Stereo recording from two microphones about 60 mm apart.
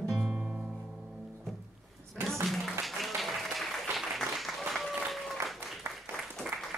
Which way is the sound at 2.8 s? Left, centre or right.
Centre.